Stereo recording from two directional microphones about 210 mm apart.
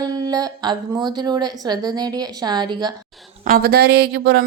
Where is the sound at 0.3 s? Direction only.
20° right (ahead or behind).